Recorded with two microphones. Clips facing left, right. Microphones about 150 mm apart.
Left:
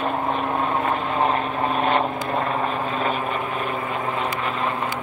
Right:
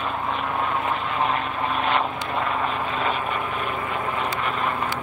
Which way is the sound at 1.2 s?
40° left (ahead or behind).